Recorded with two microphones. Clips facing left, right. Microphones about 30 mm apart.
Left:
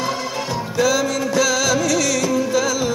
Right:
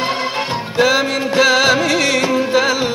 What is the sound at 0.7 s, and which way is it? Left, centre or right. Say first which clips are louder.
Music: right 4 dB; right.